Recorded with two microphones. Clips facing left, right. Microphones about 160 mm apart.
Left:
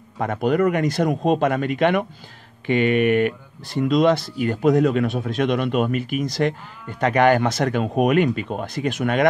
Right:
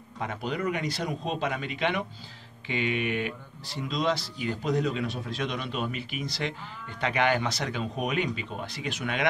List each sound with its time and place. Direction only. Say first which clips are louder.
0.2 s speech: left 12 dB; 50° left (ahead or behind)